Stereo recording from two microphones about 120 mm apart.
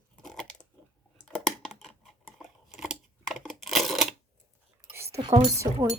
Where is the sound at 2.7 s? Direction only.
5° right (ahead or behind).